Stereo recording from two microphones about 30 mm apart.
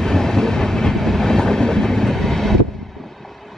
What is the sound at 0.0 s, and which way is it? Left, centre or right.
Train, centre.